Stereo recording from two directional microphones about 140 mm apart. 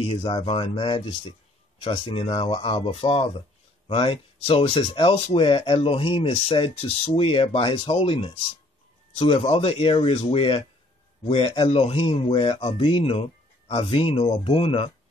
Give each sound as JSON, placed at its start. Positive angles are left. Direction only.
{"t": 0.0, "sound": "speech", "side_deg": 40}